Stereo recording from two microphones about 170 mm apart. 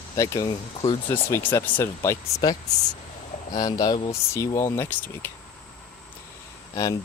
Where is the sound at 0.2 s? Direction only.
20° left (ahead or behind).